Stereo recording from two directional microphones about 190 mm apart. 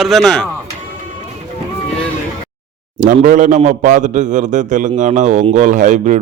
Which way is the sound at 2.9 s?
45° right (ahead or behind).